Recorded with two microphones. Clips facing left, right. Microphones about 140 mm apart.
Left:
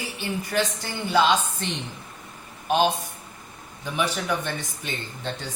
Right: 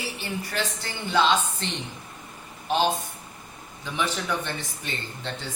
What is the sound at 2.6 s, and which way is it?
A man's voice, 15° left (ahead or behind).